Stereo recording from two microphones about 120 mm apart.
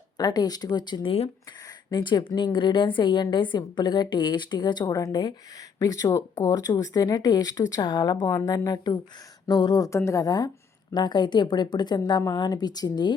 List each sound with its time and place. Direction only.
0.2 s a woman's voice: 35° left (ahead or behind)